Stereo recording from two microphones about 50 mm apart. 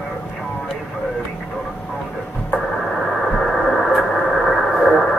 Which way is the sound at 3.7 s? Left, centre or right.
Centre.